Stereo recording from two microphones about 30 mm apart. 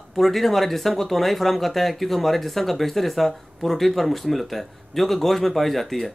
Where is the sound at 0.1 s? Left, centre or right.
Centre.